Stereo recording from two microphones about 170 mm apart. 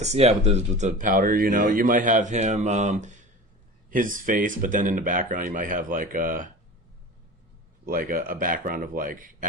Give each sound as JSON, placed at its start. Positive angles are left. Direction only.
{"t": 0.0, "sound": "speech", "side_deg": -40}
{"t": 7.9, "sound": "a man's voice", "side_deg": -55}